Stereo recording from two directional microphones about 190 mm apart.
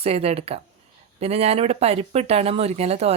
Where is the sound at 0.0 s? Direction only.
30° right (ahead or behind).